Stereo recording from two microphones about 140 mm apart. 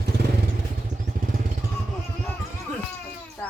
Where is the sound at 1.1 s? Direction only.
90° right.